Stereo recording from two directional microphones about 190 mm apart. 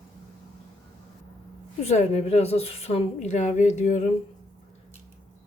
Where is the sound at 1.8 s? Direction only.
35° left (ahead or behind).